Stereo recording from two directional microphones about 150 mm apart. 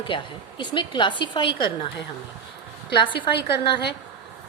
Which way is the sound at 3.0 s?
35° left (ahead or behind).